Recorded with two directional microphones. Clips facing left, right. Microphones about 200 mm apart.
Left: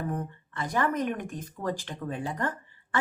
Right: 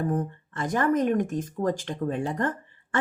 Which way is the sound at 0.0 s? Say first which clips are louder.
Right 6 dB; 45° right (ahead or behind).